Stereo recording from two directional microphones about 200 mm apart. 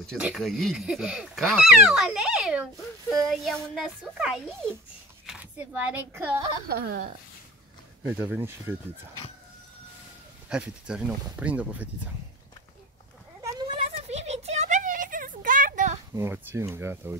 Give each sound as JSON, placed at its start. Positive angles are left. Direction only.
{"t": 0.0, "sound": "speech", "side_deg": 0}
{"t": 6.7, "sound": "speech", "side_deg": -50}
{"t": 8.0, "sound": "speech", "side_deg": -10}
{"t": 10.5, "sound": "speech", "side_deg": -5}
{"t": 13.9, "sound": "a sound", "side_deg": -35}
{"t": 16.2, "sound": "speech", "side_deg": -15}